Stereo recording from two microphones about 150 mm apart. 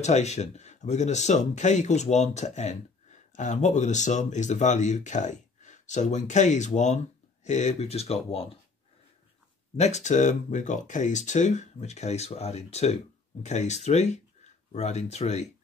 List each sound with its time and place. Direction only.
0.0 s speech: 50° left (ahead or behind)
9.8 s speech: 50° left (ahead or behind)